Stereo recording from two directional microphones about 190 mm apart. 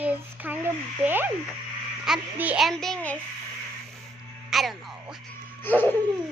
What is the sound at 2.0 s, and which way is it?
A child's voice, 5° right (ahead or behind).